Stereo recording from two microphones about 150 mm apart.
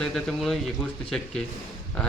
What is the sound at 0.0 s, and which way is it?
Speech, 5° left (ahead or behind).